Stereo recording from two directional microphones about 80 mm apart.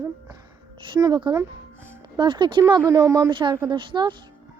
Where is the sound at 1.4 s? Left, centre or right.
Right.